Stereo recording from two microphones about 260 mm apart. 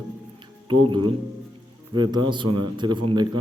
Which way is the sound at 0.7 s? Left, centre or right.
Centre.